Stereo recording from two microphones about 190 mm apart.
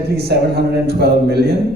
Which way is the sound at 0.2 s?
60° right (ahead or behind).